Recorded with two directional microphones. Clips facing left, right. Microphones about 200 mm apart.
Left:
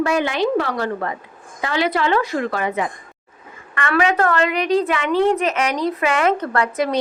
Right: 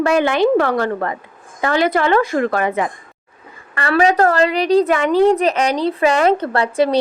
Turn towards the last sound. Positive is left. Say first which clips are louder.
# right 4 dB
turn(degrees=-30)  # may be behind; listen again after turning